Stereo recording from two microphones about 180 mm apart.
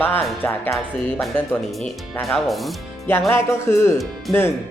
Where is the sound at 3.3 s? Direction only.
15° left (ahead or behind).